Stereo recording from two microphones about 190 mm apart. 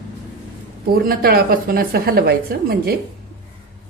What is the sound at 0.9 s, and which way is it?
A woman's voice, 55° right (ahead or behind).